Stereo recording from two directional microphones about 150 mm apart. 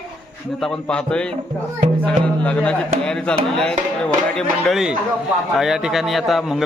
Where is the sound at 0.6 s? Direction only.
5° left (ahead or behind).